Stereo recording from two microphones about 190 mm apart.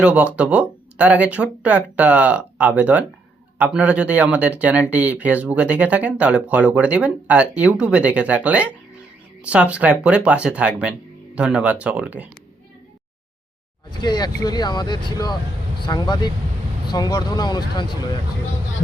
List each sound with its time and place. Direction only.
0.0 s speech: 5° right (ahead or behind)
14.0 s speech: 20° left (ahead or behind)